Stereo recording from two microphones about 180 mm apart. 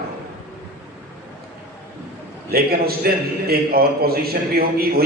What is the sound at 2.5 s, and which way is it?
A man's voice, 60° right (ahead or behind).